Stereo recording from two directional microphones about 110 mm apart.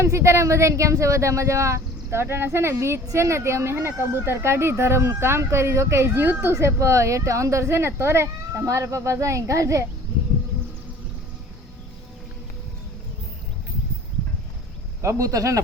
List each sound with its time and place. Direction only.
0.0 s speech: 25° right (ahead or behind)
15.0 s speech: 30° right (ahead or behind)